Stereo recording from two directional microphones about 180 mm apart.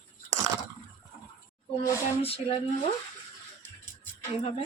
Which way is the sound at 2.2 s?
30° left (ahead or behind).